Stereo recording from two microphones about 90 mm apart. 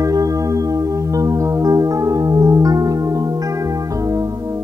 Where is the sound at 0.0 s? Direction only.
40° right (ahead or behind).